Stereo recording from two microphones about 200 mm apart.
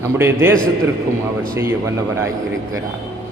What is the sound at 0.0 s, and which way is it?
Speech, 10° right (ahead or behind).